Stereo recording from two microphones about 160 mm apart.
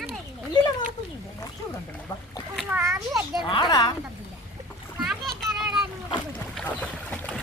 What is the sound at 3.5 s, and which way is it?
Speech, 25° left (ahead or behind).